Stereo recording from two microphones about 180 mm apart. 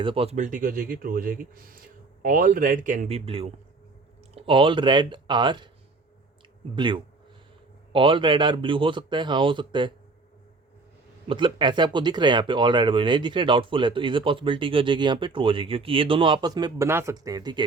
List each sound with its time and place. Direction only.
0.0 s speech: 30° right (ahead or behind)
6.7 s speech: 25° right (ahead or behind)
11.3 s speech: 30° right (ahead or behind)